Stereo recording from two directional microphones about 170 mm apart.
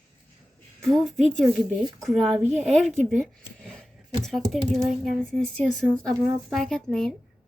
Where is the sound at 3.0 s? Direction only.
Centre (ahead or behind).